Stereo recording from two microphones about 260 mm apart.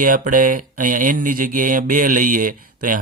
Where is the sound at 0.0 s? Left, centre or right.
Right.